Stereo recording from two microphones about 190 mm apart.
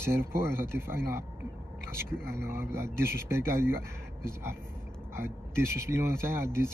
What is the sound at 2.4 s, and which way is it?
Speech, 15° right (ahead or behind).